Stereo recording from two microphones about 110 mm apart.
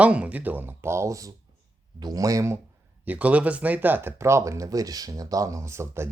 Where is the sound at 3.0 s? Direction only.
15° right (ahead or behind).